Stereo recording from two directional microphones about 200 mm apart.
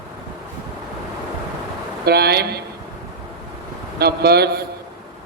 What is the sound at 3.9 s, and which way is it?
Speech, 55° right (ahead or behind).